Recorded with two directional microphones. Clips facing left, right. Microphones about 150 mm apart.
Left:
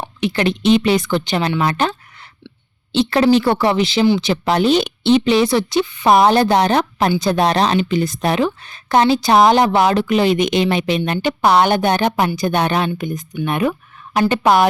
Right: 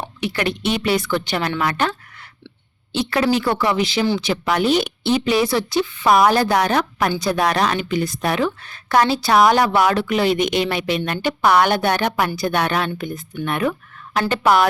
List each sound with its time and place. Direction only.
0.2 s a woman's voice: 20° left (ahead or behind)